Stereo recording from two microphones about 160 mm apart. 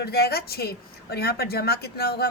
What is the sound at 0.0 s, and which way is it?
A man's voice, 80° left.